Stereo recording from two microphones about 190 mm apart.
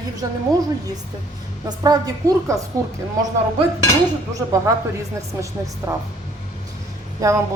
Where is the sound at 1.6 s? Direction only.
20° right (ahead or behind).